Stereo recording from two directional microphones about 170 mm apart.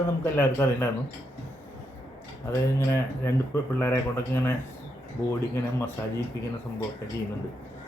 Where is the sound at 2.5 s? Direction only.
15° left (ahead or behind).